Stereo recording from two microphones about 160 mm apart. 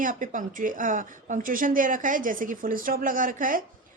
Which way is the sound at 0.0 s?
55° right (ahead or behind).